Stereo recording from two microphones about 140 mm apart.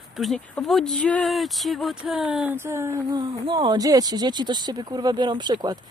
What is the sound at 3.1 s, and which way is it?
Speech, 35° right (ahead or behind).